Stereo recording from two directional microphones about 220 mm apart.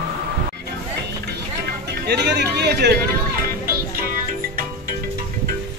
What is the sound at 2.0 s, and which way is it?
Speech, 50° right (ahead or behind).